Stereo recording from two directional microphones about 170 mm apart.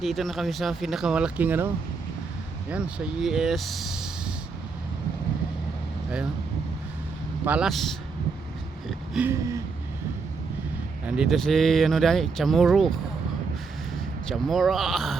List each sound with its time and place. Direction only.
0.0 s speech: centre (ahead or behind)
7.4 s speech: 5° right (ahead or behind)
8.9 s a sound: 5° right (ahead or behind)
9.3 s a sound: 20° right (ahead or behind)
11.0 s speech: centre (ahead or behind)
14.3 s speech: centre (ahead or behind)